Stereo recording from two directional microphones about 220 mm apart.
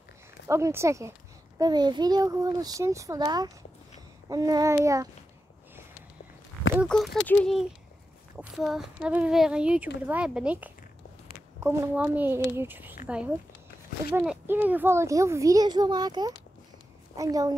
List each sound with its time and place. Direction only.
0.5 s a child's voice: 10° right (ahead or behind)
6.9 s a child's voice: 5° left (ahead or behind); by 17.6 s 15° right (ahead or behind)